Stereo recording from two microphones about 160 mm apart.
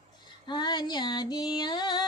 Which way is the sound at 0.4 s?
30° left (ahead or behind).